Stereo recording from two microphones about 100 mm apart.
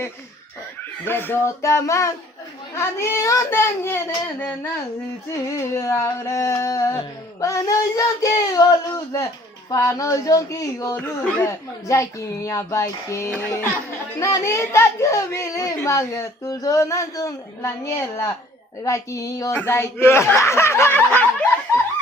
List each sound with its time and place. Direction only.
1.0 s speech: 20° left (ahead or behind)
5.5 s speech: 30° left (ahead or behind)
10.9 s speech: 15° left (ahead or behind)